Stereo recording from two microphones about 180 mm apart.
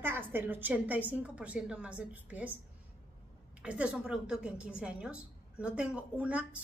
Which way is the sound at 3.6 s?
5° right (ahead or behind).